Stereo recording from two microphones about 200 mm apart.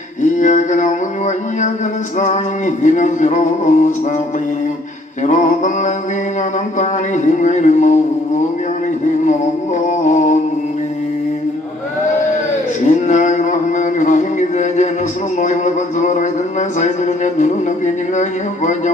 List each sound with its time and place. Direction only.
0.2 s a sound: 35° left (ahead or behind)
2.1 s music: 35° left (ahead or behind)
5.2 s music: 40° left (ahead or behind)
9.7 s music: 35° left (ahead or behind)
12.8 s a sound: 35° left (ahead or behind)
15.4 s music: 35° left (ahead or behind)